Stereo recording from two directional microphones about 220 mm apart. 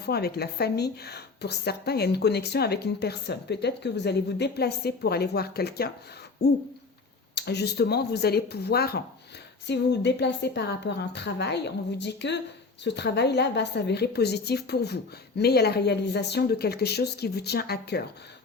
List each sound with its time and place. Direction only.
0.0 s a woman's voice: 45° left (ahead or behind)
7.3 s a woman's voice: 50° left (ahead or behind)